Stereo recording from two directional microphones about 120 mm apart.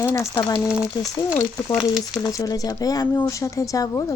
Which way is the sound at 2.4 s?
30° left (ahead or behind).